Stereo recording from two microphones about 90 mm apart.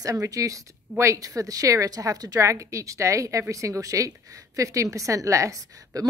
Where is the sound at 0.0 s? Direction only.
40° right (ahead or behind).